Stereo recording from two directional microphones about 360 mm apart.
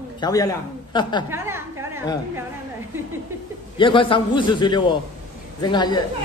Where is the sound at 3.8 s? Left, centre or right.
Centre.